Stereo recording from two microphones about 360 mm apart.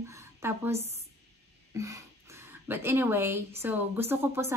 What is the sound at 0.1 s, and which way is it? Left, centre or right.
A woman's voice, centre.